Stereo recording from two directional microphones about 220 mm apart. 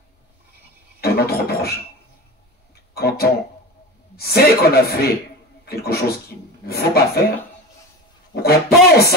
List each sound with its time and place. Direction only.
1.0 s a sound: 45° left (ahead or behind)
2.7 s music: 45° left (ahead or behind)
4.2 s speech: 45° left (ahead or behind)
8.4 s speech: 45° left (ahead or behind)